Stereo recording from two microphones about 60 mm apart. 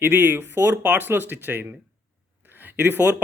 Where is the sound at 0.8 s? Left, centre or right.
Right.